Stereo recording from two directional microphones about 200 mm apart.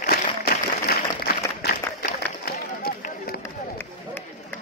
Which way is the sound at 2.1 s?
45° left (ahead or behind).